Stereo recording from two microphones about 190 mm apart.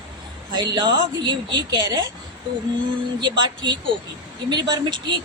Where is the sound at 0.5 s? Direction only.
25° right (ahead or behind).